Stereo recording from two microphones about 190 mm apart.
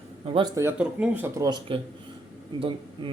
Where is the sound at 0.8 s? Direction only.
5° right (ahead or behind).